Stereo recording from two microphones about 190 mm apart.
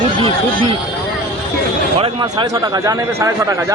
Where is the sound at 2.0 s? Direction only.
25° right (ahead or behind).